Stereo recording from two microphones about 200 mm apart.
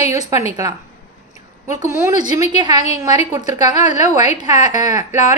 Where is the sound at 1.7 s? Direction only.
15° right (ahead or behind).